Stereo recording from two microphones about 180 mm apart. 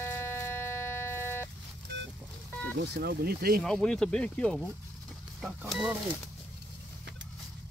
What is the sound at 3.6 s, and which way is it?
Speech, 5° left (ahead or behind).